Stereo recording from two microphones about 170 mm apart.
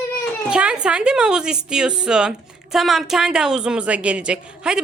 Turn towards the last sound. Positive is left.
turn(degrees=-5)  # may be behind; listen again after turning